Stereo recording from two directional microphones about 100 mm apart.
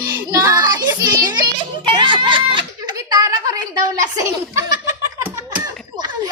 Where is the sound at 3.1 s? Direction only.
35° right (ahead or behind).